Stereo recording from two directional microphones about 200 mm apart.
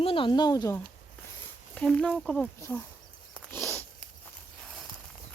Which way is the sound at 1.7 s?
5° left (ahead or behind).